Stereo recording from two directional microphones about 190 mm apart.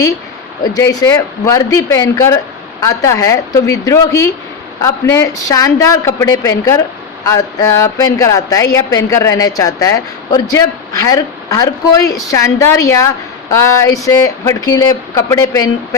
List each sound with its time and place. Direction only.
0.6 s a woman's voice: 20° left (ahead or behind)